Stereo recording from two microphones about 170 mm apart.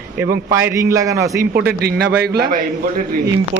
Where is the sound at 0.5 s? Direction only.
15° right (ahead or behind).